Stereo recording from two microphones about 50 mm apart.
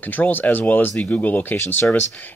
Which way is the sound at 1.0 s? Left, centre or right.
Left.